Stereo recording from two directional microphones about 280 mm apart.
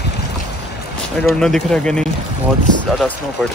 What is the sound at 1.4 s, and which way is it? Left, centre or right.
Speech, centre.